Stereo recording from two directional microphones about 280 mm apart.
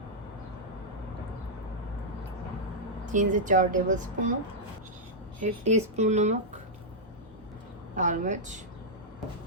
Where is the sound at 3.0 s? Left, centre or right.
Right.